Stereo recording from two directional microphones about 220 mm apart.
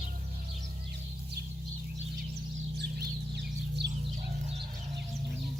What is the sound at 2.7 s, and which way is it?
Bird, 50° right (ahead or behind).